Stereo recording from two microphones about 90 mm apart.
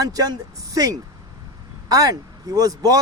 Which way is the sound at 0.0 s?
45° right (ahead or behind).